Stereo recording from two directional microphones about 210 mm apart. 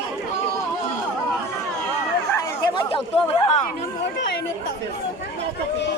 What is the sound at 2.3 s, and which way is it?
Chatter, 20° left (ahead or behind).